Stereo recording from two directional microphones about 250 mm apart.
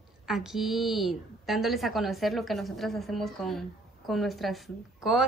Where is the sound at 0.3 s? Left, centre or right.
Centre.